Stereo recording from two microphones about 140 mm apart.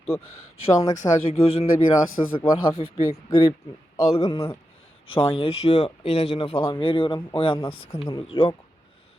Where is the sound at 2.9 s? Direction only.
45° left (ahead or behind).